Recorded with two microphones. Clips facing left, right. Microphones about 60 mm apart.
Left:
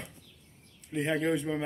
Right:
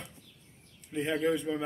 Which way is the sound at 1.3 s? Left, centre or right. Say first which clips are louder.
Left 1 dB; centre.